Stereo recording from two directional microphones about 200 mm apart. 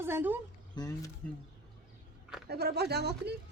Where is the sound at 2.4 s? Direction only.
50° right (ahead or behind).